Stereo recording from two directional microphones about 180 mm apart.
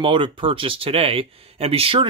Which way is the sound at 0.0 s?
25° right (ahead or behind).